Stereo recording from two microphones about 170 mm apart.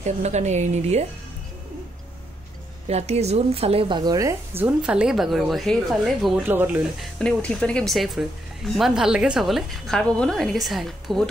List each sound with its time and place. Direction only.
0.0 s a woman's voice: 40° right (ahead or behind)
2.9 s speech: 40° right (ahead or behind); by 6.8 s 10° right (ahead or behind)
7.0 s a woman's voice: 5° left (ahead or behind)